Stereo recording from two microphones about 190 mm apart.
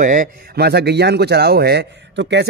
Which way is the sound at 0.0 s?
45° right (ahead or behind).